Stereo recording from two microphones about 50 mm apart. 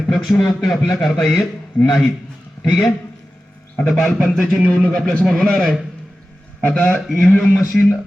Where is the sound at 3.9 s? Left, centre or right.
Centre.